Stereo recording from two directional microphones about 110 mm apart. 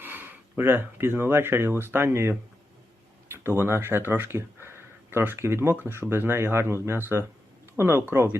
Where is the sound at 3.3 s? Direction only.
20° right (ahead or behind).